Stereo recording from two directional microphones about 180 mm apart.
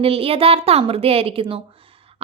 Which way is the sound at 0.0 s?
30° right (ahead or behind).